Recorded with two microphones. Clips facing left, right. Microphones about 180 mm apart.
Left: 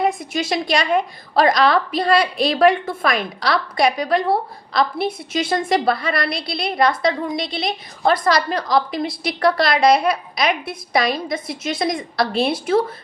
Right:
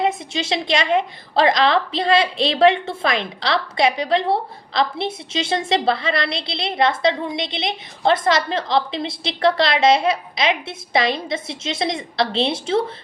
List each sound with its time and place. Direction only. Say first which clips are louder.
0.0 s a woman's voice: left 1 dB; 25° right (ahead or behind)